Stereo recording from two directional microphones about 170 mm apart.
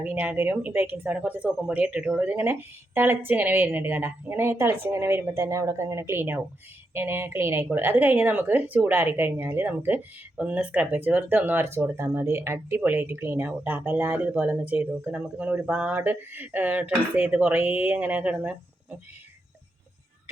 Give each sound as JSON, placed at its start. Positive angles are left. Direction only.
{"t": 0.0, "sound": "a woman's voice", "side_deg": -10}